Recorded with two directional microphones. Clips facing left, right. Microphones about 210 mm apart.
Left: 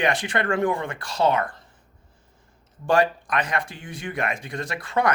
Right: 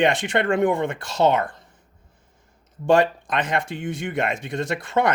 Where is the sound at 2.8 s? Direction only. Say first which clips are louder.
Right 3 dB; 25° right (ahead or behind).